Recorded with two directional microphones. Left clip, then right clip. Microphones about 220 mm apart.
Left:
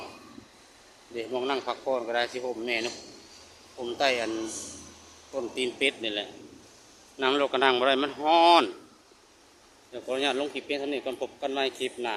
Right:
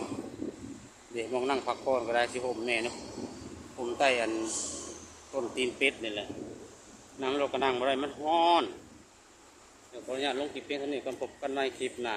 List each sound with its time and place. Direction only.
1.1 s speech: 15° left (ahead or behind)
5.3 s speech: 15° left (ahead or behind)
6.0 s speech: 30° left (ahead or behind); by 8.6 s 50° left (ahead or behind)
9.9 s speech: 55° left (ahead or behind); by 12.1 s 35° left (ahead or behind)